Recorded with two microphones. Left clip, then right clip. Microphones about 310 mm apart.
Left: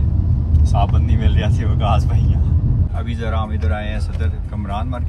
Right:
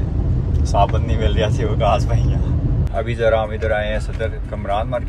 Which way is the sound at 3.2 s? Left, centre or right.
Centre.